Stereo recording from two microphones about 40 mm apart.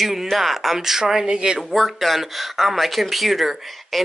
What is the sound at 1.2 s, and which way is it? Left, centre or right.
Speech, centre.